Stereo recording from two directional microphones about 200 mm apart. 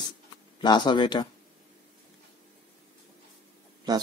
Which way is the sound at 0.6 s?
20° left (ahead or behind).